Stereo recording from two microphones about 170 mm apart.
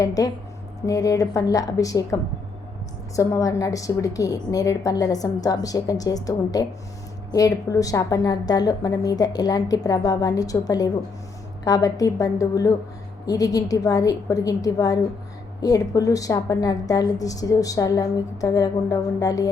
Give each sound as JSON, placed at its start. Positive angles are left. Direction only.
{"t": 0.0, "sound": "a woman's voice", "side_deg": 20}
{"t": 3.2, "sound": "a woman's voice", "side_deg": 20}